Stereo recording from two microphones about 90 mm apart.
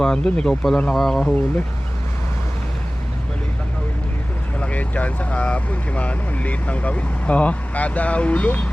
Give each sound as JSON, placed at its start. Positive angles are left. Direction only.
{"t": 0.0, "sound": "speech", "side_deg": 10}
{"t": 4.6, "sound": "speech", "side_deg": 15}